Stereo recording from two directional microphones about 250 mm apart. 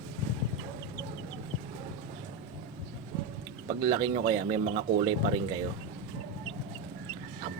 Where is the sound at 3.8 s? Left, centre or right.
Centre.